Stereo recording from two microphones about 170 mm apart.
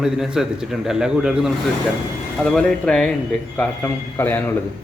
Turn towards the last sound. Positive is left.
turn(degrees=15)  # may be behind; listen again after turning